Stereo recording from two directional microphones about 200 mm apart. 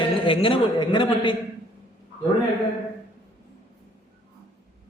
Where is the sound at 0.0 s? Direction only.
25° left (ahead or behind).